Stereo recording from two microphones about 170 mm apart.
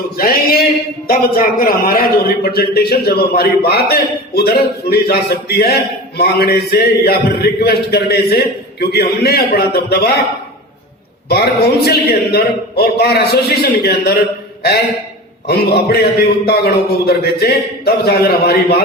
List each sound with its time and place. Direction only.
0.2 s a man's voice: 65° left (ahead or behind)
11.3 s a man's voice: 70° left (ahead or behind)